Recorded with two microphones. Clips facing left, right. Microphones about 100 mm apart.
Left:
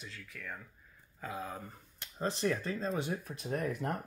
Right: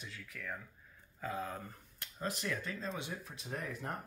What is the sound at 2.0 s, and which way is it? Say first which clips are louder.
Speech: left 6 dB; 30° left (ahead or behind).